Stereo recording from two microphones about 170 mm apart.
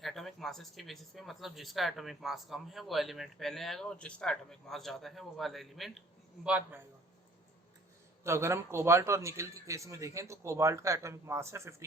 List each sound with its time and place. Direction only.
0.0 s a man's voice: centre (ahead or behind)
8.2 s a man's voice: 15° right (ahead or behind)